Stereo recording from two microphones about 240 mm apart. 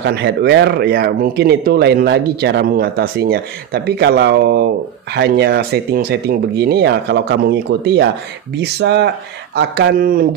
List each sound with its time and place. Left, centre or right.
0.0 s speech: right